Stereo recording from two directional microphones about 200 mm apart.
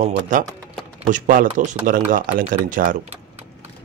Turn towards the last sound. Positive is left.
turn(degrees=-40)  # may be behind; listen again after turning